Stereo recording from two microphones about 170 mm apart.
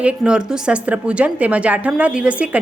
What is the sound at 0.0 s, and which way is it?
A woman's voice, 5° right (ahead or behind).